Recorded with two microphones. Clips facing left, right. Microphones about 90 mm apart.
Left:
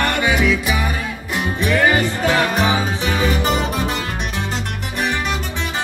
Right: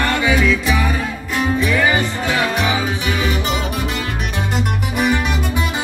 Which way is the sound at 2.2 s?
40° left (ahead or behind).